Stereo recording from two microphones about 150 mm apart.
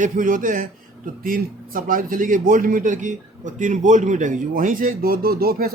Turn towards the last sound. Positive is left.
turn(degrees=-85)